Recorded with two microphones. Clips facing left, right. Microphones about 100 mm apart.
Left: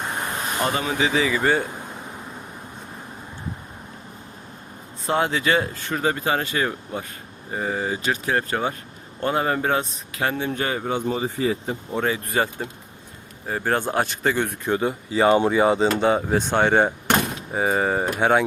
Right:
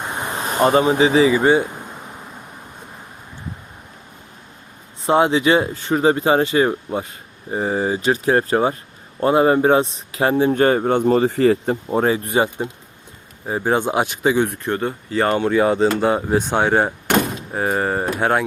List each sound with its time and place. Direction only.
0.3 s speech: 35° right (ahead or behind)
5.0 s speech: 25° right (ahead or behind)
10.5 s speech: 45° right (ahead or behind)
12.0 s speech: 30° right (ahead or behind); by 18.4 s centre (ahead or behind)